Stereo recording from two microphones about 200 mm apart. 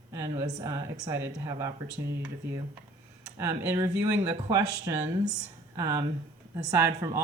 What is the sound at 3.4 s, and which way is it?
Speech, 10° right (ahead or behind).